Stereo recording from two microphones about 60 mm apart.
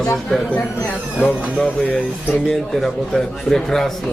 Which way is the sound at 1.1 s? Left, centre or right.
Left.